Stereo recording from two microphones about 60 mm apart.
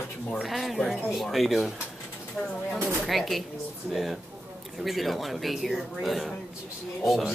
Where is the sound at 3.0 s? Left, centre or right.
Centre.